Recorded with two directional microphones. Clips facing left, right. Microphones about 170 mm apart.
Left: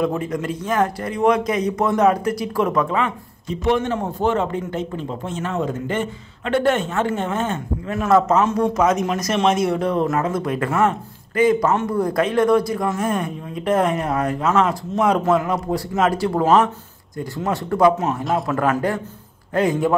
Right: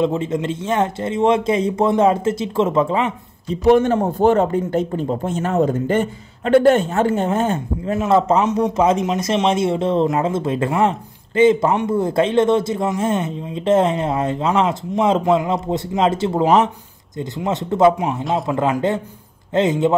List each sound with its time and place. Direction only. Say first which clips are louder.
0.0 s speech: right 3 dB; 25° right (ahead or behind)
3.4 s a man's voice: right 6 dB; 40° right (ahead or behind); by 20.0 s 20° right (ahead or behind)